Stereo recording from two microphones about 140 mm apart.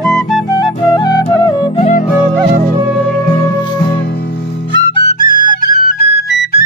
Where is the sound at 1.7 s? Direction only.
70° left (ahead or behind).